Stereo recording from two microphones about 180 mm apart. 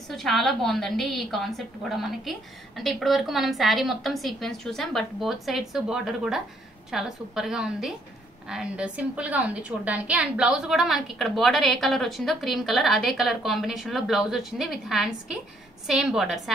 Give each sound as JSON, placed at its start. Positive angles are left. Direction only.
{"t": 0.1, "sound": "a woman's voice", "side_deg": 0}